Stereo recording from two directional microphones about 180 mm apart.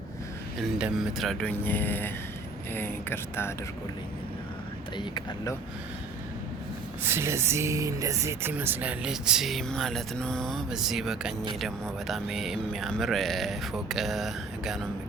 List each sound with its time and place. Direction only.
0.6 s speech: centre (ahead or behind)
4.9 s speech: 25° left (ahead or behind)
7.0 s speech: 15° right (ahead or behind)